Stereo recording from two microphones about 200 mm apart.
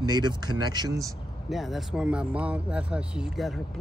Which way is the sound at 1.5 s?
Centre (ahead or behind).